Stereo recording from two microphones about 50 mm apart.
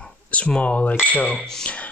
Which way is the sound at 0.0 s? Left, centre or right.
Left.